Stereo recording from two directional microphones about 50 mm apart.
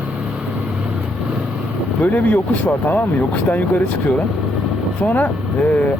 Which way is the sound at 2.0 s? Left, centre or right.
Left.